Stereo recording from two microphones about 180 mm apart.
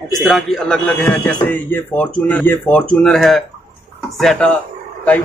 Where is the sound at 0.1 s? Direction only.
Centre (ahead or behind).